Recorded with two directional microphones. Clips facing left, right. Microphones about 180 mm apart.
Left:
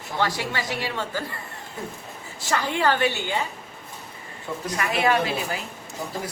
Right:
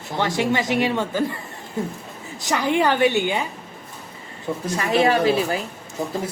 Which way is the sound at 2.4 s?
15° right (ahead or behind).